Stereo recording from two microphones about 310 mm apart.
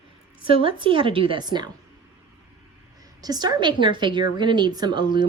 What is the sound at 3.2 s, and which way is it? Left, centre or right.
A woman's voice, centre.